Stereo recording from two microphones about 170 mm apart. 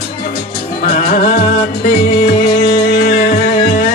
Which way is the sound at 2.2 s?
60° left (ahead or behind).